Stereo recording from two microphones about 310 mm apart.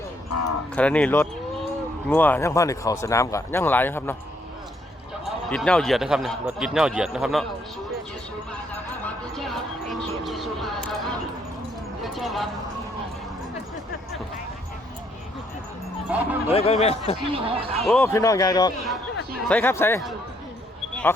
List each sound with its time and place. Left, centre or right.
0.8 s speech: centre
5.2 s speech: centre
9.3 s music: centre
12.0 s clip-clop: centre
16.1 s speech: centre
16.5 s speech: centre
17.3 s speech: centre
17.7 s speech: centre